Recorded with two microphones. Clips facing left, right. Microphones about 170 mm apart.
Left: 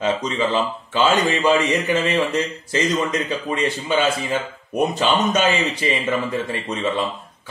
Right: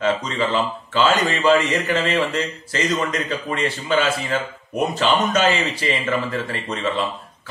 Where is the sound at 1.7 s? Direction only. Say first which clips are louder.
Left 1 dB; 20° left (ahead or behind).